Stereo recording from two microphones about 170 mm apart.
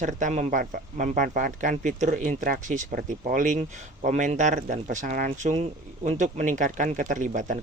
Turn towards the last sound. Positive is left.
turn(degrees=-50)  # may be behind; listen again after turning